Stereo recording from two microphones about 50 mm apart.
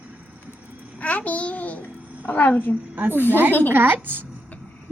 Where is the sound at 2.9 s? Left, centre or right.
Right.